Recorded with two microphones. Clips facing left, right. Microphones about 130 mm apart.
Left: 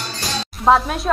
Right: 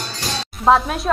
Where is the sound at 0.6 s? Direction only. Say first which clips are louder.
Even; centre (ahead or behind).